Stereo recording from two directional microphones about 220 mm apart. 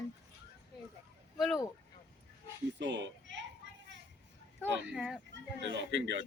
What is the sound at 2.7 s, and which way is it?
Speech, 55° right (ahead or behind).